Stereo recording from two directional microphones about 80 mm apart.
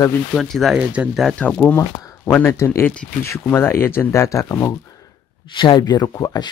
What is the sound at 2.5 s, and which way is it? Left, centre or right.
Speech, left.